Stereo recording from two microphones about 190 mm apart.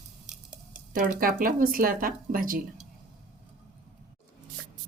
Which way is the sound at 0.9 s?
45° right (ahead or behind).